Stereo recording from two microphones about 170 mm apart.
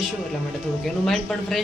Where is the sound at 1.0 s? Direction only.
Centre (ahead or behind).